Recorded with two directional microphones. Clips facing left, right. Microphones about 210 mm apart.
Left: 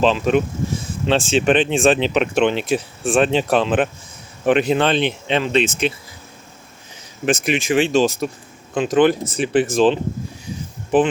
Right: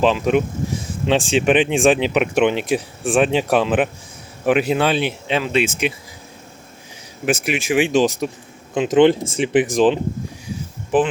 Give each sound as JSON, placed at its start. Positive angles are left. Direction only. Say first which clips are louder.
{"t": 0.0, "sound": "speech", "louder": "even", "side_deg": -15}
{"t": 7.3, "sound": "speech", "louder": "left 1 dB", "side_deg": -5}
{"t": 10.9, "sound": "speech", "louder": "left 1 dB", "side_deg": -5}